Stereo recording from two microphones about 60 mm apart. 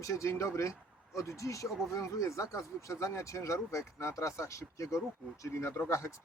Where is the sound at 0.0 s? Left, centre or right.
Left.